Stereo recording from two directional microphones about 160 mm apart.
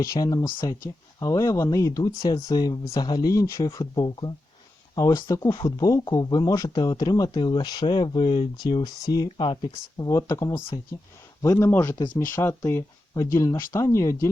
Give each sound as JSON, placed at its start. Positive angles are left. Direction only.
{"t": 0.0, "sound": "speech", "side_deg": 20}